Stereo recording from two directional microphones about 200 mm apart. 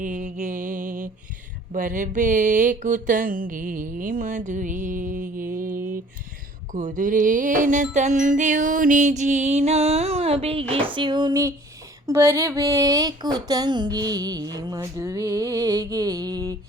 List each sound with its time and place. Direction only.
0.0 s mantra: 40° right (ahead or behind)
1.7 s a sound: 40° right (ahead or behind)
10.9 s speech: 25° right (ahead or behind)